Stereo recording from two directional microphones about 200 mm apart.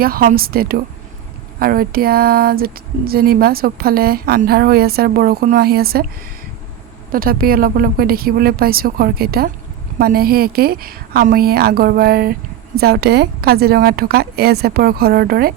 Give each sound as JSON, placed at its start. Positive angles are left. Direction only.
{"t": 0.0, "sound": "a woman's voice", "side_deg": -45}
{"t": 7.1, "sound": "a woman's voice", "side_deg": -45}